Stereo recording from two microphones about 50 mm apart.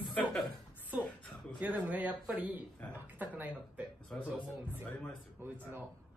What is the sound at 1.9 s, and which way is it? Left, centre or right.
Speech, right.